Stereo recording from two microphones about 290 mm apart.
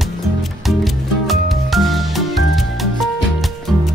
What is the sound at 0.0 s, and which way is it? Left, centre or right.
Music, centre.